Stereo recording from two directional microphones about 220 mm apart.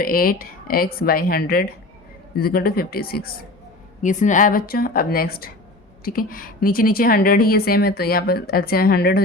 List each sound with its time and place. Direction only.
0.0 s a woman's voice: 40° left (ahead or behind)